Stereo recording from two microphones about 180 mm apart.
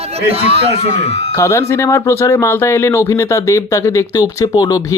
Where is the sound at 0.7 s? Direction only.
35° left (ahead or behind).